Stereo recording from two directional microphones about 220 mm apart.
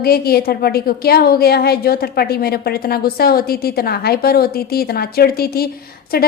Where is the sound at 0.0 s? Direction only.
45° left (ahead or behind).